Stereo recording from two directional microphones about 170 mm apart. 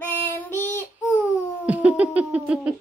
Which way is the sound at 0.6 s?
15° left (ahead or behind).